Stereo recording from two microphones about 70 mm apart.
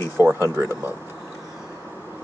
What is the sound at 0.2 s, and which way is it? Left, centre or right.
Speech, right.